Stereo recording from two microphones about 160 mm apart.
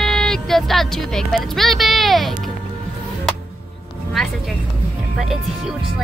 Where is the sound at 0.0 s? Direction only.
5° left (ahead or behind).